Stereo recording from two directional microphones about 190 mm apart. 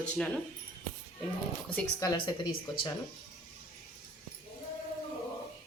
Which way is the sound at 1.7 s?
15° left (ahead or behind).